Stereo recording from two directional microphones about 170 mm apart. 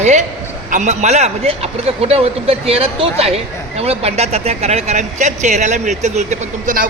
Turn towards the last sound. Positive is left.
turn(degrees=-50)  # may be behind; listen again after turning